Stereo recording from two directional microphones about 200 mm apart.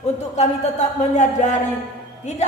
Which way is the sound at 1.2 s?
35° left (ahead or behind).